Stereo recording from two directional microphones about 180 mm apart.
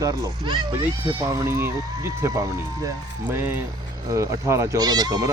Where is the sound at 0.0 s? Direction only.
20° right (ahead or behind).